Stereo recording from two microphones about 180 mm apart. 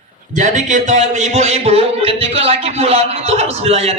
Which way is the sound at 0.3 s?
45° right (ahead or behind).